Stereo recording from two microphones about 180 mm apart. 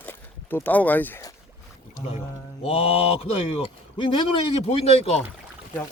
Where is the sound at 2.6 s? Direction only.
35° left (ahead or behind).